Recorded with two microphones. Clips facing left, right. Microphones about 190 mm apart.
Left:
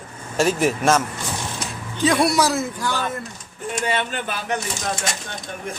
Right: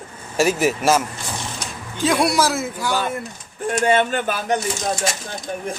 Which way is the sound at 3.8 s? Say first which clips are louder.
Right 7 dB; 45° right (ahead or behind).